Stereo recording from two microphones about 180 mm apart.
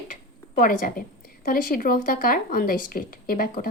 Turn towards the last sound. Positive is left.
turn(degrees=50)  # may be behind; listen again after turning